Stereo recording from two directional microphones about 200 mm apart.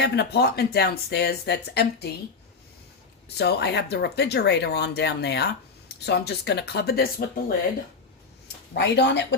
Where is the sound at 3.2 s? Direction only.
55° left (ahead or behind).